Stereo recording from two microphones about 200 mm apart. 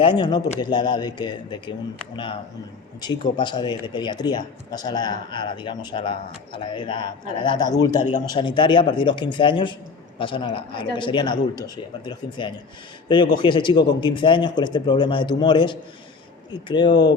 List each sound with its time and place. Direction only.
0.0 s speech: 25° left (ahead or behind)